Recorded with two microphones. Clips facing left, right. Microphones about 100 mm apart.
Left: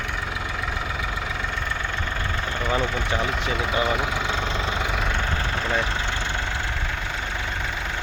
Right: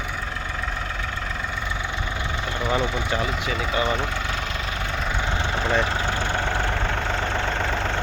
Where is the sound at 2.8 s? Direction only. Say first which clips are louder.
Right 1 dB; 15° right (ahead or behind).